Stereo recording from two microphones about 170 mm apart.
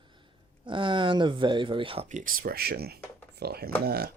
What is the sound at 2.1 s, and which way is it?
Speech, 50° right (ahead or behind).